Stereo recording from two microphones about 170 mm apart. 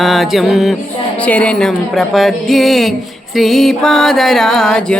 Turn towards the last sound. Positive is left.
turn(degrees=5)  # may be behind; listen again after turning